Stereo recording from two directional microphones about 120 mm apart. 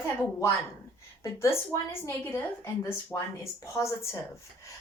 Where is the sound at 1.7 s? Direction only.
20° left (ahead or behind).